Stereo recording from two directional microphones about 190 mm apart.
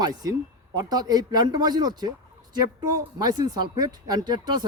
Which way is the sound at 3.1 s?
20° right (ahead or behind).